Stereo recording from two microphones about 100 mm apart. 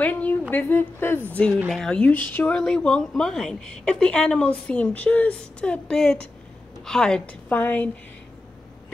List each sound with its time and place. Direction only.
0.0 s a woman's voice: 15° left (ahead or behind)